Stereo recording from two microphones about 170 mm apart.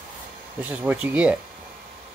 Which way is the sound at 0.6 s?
10° right (ahead or behind).